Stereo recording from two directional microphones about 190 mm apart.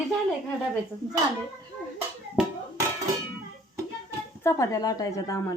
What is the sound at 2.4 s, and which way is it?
Hands, 5° right (ahead or behind).